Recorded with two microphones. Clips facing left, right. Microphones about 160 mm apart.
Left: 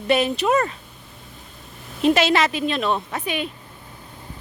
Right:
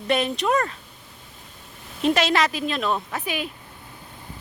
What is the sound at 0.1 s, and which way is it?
Speech, 5° left (ahead or behind).